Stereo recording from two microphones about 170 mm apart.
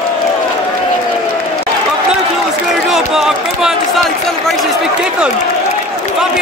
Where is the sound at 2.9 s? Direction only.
Centre (ahead or behind).